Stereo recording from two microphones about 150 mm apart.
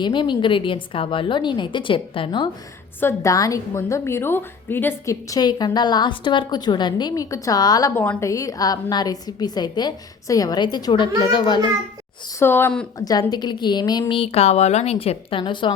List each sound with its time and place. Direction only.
0.0 s a woman's voice: 30° left (ahead or behind)
3.0 s a woman's voice: 20° left (ahead or behind)
12.4 s speech: 15° left (ahead or behind)
13.0 s a woman's voice: 25° left (ahead or behind)
14.2 s a woman's voice: 45° left (ahead or behind)